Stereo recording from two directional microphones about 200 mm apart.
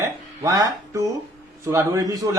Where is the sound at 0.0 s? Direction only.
15° right (ahead or behind).